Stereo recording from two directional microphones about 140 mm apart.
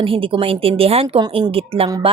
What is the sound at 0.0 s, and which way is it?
Speech, 40° right (ahead or behind).